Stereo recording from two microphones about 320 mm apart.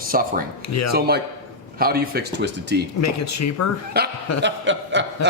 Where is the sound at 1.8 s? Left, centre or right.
Right.